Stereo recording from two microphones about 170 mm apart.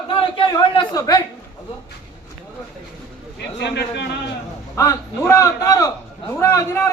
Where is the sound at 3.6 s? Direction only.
80° left.